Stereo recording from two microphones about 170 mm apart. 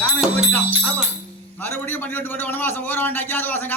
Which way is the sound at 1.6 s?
10° left (ahead or behind).